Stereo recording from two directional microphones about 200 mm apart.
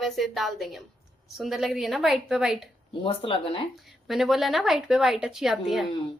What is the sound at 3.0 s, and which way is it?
Speech, 25° left (ahead or behind).